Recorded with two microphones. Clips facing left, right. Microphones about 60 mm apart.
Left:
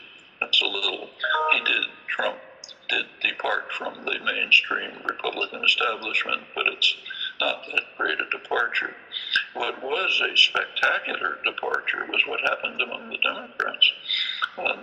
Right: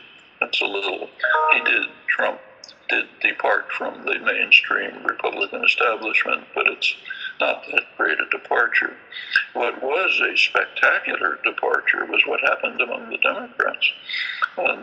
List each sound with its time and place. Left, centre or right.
0.3 s a man's voice: right